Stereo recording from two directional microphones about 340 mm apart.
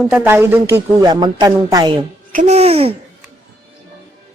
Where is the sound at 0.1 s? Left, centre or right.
Centre.